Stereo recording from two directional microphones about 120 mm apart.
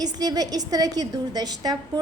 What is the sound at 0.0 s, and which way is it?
A woman's voice, 35° right (ahead or behind).